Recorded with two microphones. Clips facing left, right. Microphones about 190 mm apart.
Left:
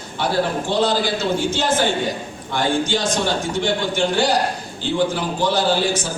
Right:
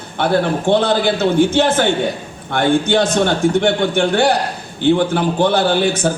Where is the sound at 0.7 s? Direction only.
60° right (ahead or behind).